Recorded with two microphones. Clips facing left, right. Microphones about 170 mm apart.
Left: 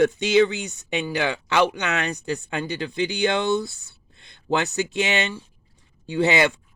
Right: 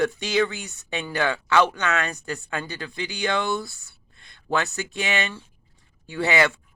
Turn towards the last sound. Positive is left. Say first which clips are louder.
# left 2 dB
turn(degrees=20)  # may be behind; listen again after turning